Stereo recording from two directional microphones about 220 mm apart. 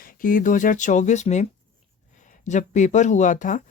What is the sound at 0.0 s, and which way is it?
Speech, 40° left (ahead or behind).